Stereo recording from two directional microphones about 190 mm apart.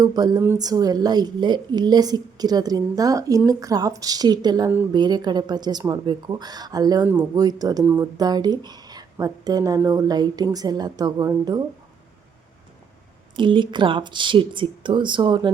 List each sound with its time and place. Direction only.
0.0 s speech: 20° right (ahead or behind)
4.7 s a woman's voice: 10° right (ahead or behind)
4.9 s speech: 20° right (ahead or behind)
13.3 s speech: 25° right (ahead or behind)